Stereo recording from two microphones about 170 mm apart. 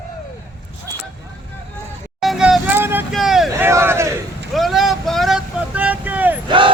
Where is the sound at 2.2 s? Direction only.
Centre (ahead or behind).